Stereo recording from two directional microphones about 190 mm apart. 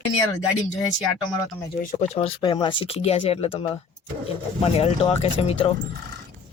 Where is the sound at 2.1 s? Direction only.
30° left (ahead or behind).